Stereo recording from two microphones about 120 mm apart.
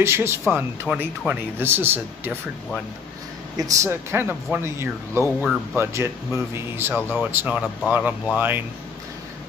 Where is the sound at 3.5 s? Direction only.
30° right (ahead or behind).